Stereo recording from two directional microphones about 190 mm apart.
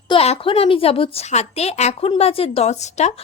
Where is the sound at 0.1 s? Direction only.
30° left (ahead or behind).